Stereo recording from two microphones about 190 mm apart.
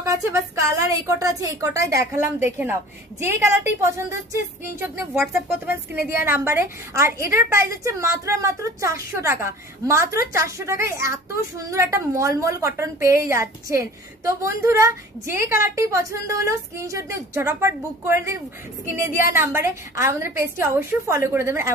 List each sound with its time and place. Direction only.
0.0 s a woman's voice: 15° right (ahead or behind)
3.2 s a woman's voice: 15° right (ahead or behind)